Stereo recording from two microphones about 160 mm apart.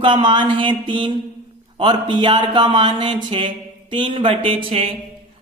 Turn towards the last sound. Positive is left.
turn(degrees=-35)  # may be behind; listen again after turning